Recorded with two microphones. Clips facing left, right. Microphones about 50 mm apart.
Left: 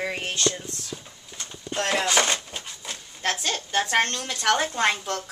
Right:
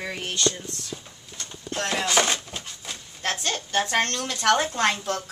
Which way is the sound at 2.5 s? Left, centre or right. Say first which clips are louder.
Even; centre.